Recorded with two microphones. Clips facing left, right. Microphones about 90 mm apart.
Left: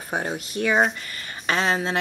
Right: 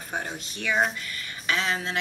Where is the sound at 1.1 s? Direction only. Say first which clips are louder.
Left 4 dB; 40° left (ahead or behind).